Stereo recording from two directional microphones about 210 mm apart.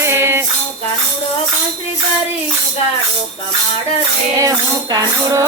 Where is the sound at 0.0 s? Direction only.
10° right (ahead or behind).